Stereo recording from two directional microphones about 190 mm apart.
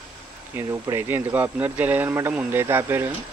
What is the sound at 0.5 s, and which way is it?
Speech, 10° right (ahead or behind).